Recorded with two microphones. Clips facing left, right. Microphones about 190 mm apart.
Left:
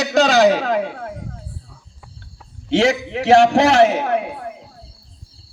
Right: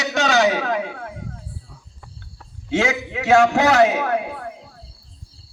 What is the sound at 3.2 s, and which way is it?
A man's voice, 30° left (ahead or behind).